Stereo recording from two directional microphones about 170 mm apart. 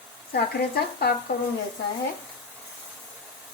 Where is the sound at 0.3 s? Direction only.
70° left (ahead or behind).